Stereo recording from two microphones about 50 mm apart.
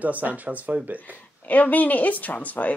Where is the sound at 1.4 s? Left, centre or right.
Left.